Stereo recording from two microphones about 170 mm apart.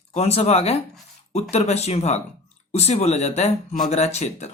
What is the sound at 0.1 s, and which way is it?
Speech, 35° left (ahead or behind).